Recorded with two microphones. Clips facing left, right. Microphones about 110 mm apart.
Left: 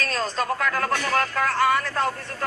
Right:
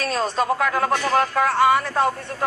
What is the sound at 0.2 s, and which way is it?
Speech, 15° right (ahead or behind).